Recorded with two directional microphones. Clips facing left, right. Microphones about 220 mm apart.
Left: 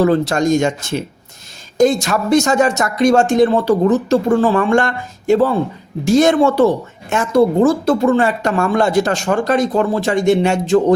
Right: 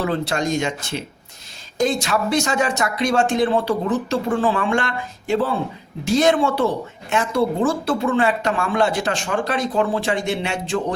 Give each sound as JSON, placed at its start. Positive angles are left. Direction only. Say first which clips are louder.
{"t": 0.0, "sound": "speech", "louder": "left 8 dB", "side_deg": 45}